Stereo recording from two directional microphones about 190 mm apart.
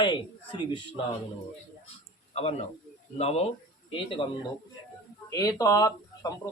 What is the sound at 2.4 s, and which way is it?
A man's voice, 35° left (ahead or behind).